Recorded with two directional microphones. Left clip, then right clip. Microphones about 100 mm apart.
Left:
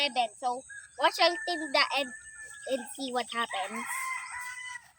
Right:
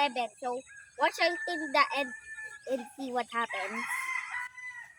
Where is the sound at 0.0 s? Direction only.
10° left (ahead or behind).